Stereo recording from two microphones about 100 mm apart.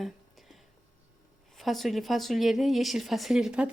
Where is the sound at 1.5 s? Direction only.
Centre (ahead or behind).